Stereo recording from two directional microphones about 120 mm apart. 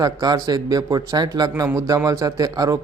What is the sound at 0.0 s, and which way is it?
A man's voice, 30° right (ahead or behind).